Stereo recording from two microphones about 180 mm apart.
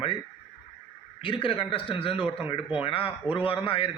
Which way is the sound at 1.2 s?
30° left (ahead or behind).